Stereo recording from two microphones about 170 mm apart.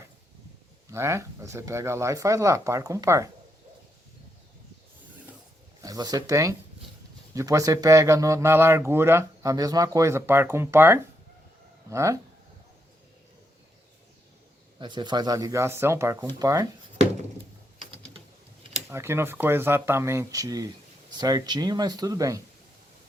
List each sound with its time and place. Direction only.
0.9 s speech: 15° right (ahead or behind)
5.8 s speech: 20° right (ahead or behind)
14.8 s speech: 25° right (ahead or behind)
18.9 s speech: 15° right (ahead or behind)